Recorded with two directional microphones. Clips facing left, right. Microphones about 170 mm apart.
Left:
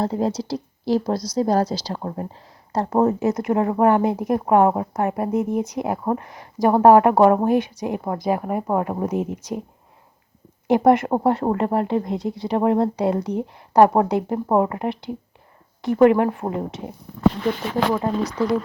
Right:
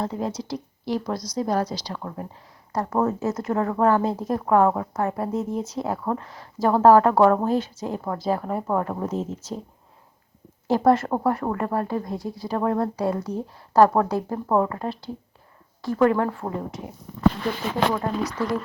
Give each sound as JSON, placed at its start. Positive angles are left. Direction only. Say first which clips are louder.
{"t": 0.0, "sound": "a woman's voice", "louder": "left 5 dB", "side_deg": 35}
{"t": 10.7, "sound": "speech", "louder": "left 3 dB", "side_deg": 20}
{"t": 18.0, "sound": "speech", "louder": "left 4 dB", "side_deg": 25}